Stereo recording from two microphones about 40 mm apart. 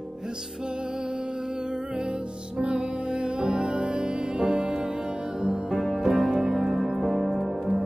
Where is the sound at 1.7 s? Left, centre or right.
Right.